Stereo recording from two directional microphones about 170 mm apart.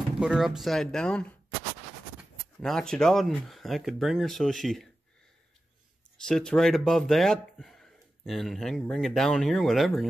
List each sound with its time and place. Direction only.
0.2 s speech: 5° right (ahead or behind)
2.6 s speech: 5° left (ahead or behind)
6.2 s speech: 5° left (ahead or behind)